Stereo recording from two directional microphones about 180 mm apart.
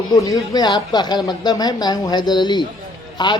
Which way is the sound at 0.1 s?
20° left (ahead or behind).